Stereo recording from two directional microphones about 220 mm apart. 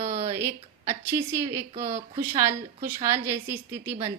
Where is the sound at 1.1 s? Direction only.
10° right (ahead or behind).